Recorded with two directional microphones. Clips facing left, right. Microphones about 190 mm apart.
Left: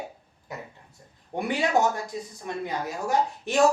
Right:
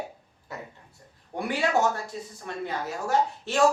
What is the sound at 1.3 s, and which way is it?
Speech, 20° left (ahead or behind).